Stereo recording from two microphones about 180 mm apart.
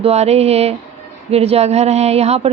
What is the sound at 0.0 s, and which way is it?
A woman's voice, 35° right (ahead or behind).